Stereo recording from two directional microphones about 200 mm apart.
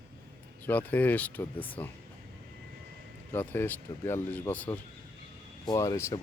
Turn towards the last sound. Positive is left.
turn(degrees=15)  # may be behind; listen again after turning